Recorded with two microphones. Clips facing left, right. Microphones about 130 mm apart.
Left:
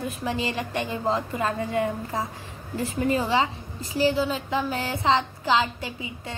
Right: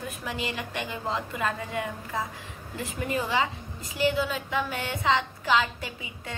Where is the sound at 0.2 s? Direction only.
30° left (ahead or behind).